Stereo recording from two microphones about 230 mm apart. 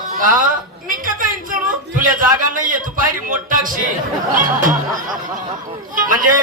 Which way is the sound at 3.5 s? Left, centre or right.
Right.